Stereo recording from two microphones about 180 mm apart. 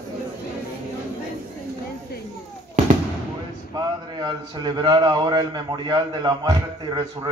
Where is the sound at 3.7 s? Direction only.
25° right (ahead or behind).